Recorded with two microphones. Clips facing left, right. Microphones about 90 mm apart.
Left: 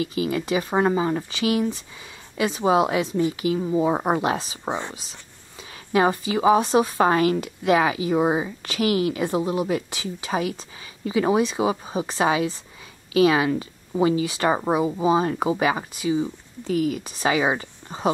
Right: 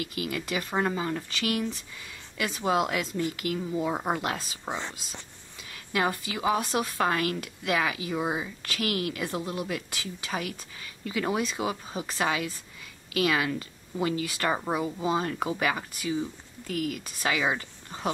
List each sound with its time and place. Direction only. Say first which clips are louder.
0.0 s speech: left 8 dB; 25° left (ahead or behind)
5.9 s speech: left 8 dB; 25° left (ahead or behind)